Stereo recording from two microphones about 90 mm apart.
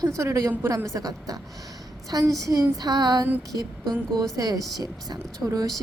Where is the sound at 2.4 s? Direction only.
40° right (ahead or behind).